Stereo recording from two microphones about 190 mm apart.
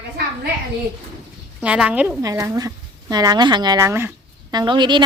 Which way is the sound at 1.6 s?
5° right (ahead or behind).